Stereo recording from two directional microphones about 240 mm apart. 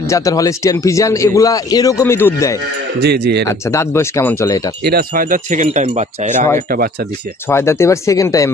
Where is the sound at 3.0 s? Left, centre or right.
Right.